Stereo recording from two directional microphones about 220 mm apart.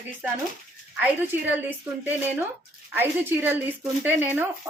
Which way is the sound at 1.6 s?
10° right (ahead or behind).